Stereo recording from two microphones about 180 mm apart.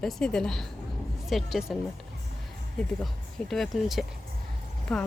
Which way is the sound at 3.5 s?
Centre (ahead or behind).